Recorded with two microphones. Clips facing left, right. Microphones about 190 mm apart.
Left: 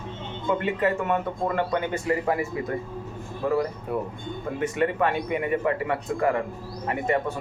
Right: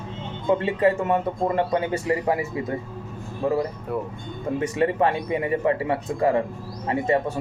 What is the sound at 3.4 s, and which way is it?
Speech, 25° right (ahead or behind).